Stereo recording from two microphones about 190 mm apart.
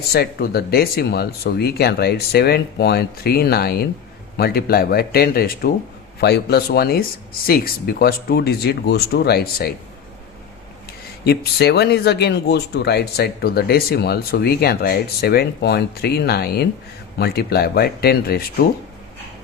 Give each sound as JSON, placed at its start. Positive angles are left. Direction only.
{"t": 0.1, "sound": "speech", "side_deg": 55}
{"t": 11.3, "sound": "speech", "side_deg": 60}